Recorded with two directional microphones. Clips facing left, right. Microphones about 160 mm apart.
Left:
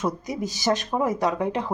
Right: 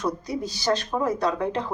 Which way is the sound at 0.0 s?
20° left (ahead or behind).